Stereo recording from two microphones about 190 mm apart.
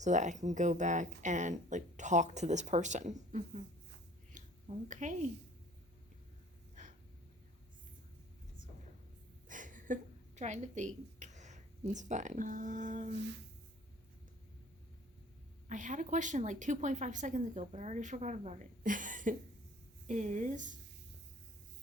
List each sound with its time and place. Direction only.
0.0 s speech: 40° right (ahead or behind)
4.3 s a sound: 40° right (ahead or behind)
4.9 s speech: 40° right (ahead or behind)
6.8 s a sound: 40° right (ahead or behind)
9.5 s a woman's voice: 45° right (ahead or behind)
15.7 s speech: 40° right (ahead or behind)